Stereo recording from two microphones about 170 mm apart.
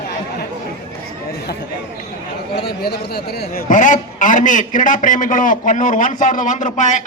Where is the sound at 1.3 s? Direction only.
65° left (ahead or behind).